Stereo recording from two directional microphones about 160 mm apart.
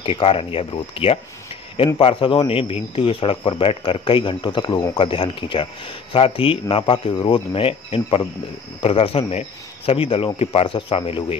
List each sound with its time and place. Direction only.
0.0 s speech: 35° left (ahead or behind)